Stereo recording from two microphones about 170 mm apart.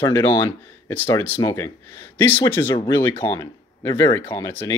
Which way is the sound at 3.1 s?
25° left (ahead or behind).